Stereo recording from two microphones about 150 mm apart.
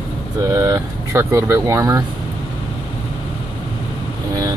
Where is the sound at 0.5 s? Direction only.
20° right (ahead or behind).